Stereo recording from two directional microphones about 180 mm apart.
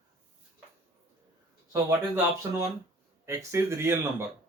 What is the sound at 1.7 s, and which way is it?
Speech, 15° right (ahead or behind).